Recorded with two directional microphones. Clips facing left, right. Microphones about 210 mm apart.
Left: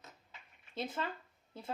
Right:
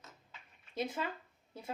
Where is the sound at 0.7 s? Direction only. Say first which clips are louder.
Right 2 dB; 10° right (ahead or behind).